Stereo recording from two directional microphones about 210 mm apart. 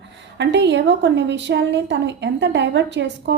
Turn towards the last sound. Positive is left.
turn(degrees=-55)  # may be behind; listen again after turning